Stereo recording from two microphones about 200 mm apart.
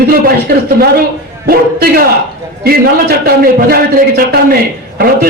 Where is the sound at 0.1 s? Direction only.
50° right (ahead or behind).